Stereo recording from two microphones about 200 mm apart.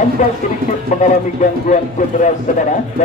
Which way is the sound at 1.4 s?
35° left (ahead or behind).